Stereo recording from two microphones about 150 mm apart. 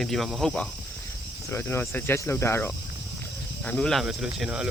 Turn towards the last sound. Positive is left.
turn(degrees=-5)  # may be behind; listen again after turning